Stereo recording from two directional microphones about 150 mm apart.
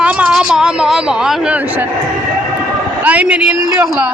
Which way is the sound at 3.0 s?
10° right (ahead or behind).